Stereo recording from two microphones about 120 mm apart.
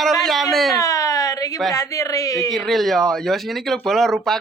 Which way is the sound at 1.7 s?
30° left (ahead or behind).